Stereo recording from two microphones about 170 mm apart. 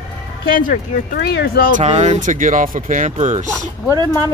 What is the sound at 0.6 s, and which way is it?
Speech, 55° left (ahead or behind).